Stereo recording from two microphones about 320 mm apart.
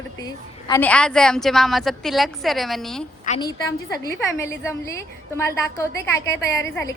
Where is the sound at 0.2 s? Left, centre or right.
Centre.